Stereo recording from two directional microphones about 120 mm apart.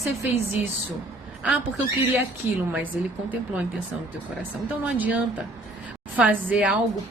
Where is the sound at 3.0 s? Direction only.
10° right (ahead or behind).